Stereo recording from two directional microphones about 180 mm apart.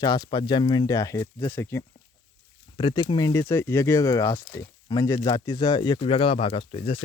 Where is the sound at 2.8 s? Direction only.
25° left (ahead or behind).